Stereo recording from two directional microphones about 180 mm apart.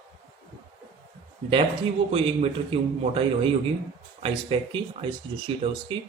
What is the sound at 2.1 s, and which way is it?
A man's voice, 35° right (ahead or behind).